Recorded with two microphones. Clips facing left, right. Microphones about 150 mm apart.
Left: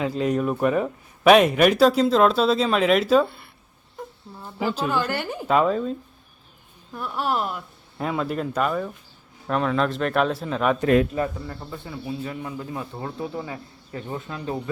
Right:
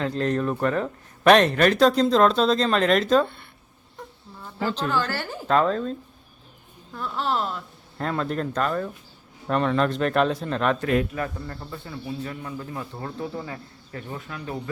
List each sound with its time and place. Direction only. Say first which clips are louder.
0.0 s speech: left 1 dB; 10° left (ahead or behind)
4.0 s a sound: left 4 dB; centre (ahead or behind)
4.4 s speech: left 1 dB; 10° left (ahead or behind)
14.1 s speech: left 4 dB; 25° left (ahead or behind)